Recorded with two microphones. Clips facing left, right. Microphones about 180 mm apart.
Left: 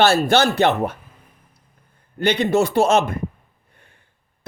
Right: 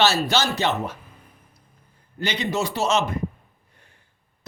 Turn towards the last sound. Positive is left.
turn(degrees=55)  # may be behind; listen again after turning